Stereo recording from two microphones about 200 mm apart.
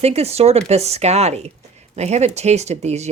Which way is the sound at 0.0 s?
30° right (ahead or behind).